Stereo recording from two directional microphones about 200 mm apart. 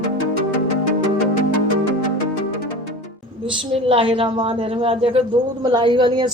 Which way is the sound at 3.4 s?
30° right (ahead or behind).